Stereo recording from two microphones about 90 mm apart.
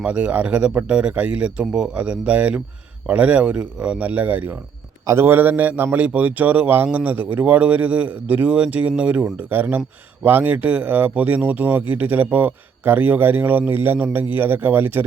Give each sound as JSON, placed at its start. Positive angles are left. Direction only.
{"t": 0.0, "sound": "speech", "side_deg": -15}